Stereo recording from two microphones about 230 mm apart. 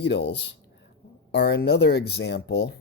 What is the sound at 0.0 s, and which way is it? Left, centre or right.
Speech, left.